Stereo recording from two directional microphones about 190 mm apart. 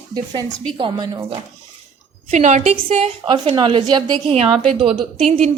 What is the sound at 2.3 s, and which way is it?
Speech, 40° right (ahead or behind).